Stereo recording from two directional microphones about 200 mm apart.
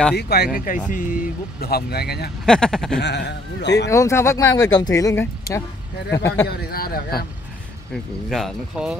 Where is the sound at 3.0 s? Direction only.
60° left (ahead or behind).